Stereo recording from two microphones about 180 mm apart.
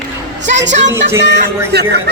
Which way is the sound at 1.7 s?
65° right (ahead or behind).